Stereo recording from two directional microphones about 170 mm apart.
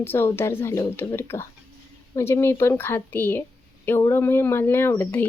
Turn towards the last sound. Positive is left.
turn(degrees=10)  # may be behind; listen again after turning